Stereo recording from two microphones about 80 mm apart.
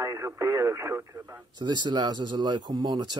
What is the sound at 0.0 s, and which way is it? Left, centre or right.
Speech, right.